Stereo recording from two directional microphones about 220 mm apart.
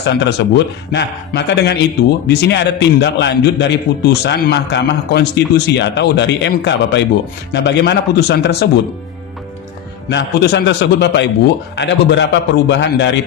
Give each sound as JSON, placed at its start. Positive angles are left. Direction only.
{"t": 0.0, "sound": "a man's voice", "side_deg": 50}
{"t": 10.1, "sound": "a man's voice", "side_deg": 50}